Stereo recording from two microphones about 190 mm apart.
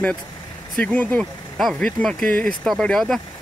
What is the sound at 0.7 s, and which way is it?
Speech, 5° left (ahead or behind).